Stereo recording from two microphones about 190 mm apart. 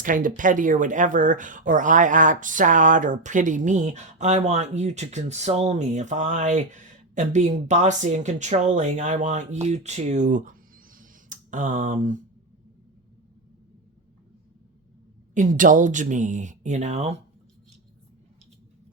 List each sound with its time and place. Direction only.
0.0 s speech: 45° right (ahead or behind)
10.9 s a sound: 45° right (ahead or behind)
15.4 s speech: 45° right (ahead or behind)